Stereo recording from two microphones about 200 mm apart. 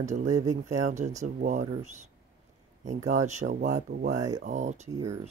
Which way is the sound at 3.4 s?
45° right (ahead or behind).